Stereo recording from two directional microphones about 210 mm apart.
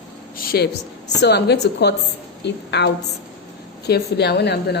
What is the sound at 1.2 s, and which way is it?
A woman's voice, 50° left (ahead or behind).